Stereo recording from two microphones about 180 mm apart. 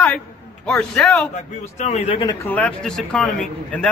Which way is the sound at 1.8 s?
35° left (ahead or behind).